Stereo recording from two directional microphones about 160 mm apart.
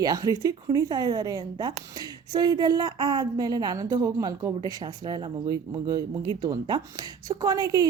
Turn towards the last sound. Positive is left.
turn(degrees=-25)  # may be behind; listen again after turning